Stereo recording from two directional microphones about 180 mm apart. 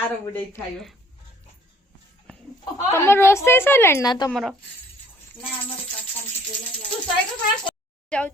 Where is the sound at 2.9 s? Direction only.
15° left (ahead or behind).